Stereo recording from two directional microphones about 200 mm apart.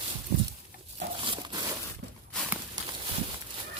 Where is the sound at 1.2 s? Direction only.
25° right (ahead or behind).